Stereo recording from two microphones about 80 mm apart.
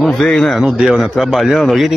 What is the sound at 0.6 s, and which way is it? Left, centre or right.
Speech, centre.